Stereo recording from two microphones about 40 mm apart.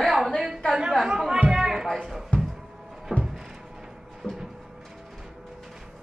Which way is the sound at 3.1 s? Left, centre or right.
Centre.